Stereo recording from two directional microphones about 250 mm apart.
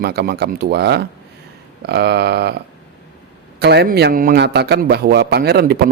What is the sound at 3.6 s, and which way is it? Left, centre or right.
A man's voice, right.